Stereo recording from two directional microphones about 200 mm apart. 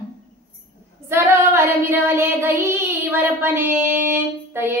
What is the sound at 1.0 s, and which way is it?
Child singing, 15° right (ahead or behind).